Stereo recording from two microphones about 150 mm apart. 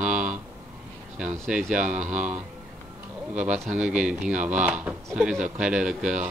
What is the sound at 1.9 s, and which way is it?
Speech, 55° right (ahead or behind).